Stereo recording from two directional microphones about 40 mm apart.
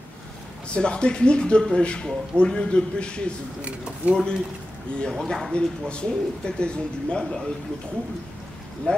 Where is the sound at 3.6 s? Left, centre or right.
Right.